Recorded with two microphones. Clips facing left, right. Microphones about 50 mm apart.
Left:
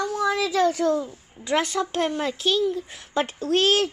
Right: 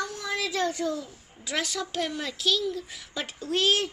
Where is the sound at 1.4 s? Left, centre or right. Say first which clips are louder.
Left 7 dB; left.